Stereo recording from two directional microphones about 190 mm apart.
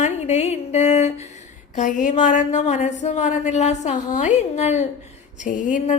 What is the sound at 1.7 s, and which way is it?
A woman's voice, 40° left (ahead or behind).